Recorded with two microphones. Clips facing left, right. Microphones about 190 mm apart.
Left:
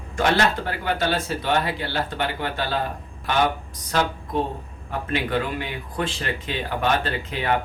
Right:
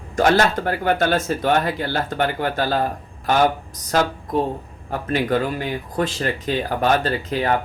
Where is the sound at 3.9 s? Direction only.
45° right (ahead or behind).